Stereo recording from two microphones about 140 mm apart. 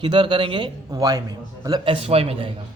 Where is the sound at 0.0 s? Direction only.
35° right (ahead or behind).